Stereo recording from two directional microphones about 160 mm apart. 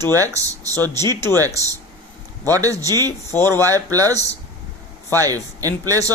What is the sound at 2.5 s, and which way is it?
A man's voice, 20° right (ahead or behind).